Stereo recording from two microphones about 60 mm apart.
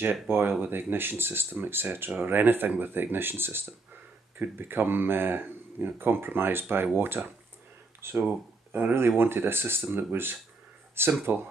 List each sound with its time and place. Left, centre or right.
0.0 s speech: right